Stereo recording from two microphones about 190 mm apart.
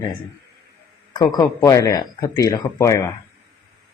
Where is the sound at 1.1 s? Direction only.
20° left (ahead or behind).